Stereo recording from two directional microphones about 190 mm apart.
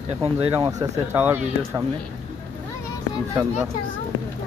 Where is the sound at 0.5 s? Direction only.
20° right (ahead or behind).